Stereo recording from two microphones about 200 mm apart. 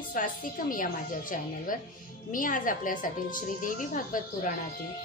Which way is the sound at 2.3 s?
40° left (ahead or behind).